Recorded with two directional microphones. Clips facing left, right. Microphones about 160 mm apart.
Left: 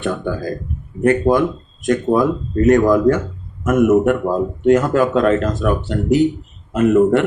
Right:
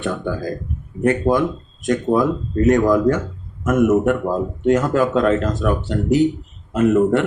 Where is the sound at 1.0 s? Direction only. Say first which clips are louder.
Left 3 dB; 55° left (ahead or behind).